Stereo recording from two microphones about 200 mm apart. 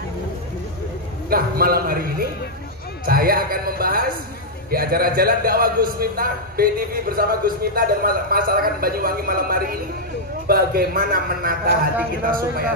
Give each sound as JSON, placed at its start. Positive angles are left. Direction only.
{"t": 1.3, "sound": "a man's voice", "side_deg": -50}